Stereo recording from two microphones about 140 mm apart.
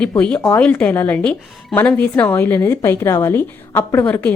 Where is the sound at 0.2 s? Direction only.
10° left (ahead or behind).